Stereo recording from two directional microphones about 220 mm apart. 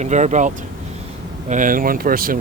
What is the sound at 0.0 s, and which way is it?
Speech, 30° right (ahead or behind).